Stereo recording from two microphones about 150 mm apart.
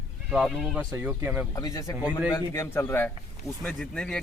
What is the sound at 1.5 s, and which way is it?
Speech, 25° left (ahead or behind).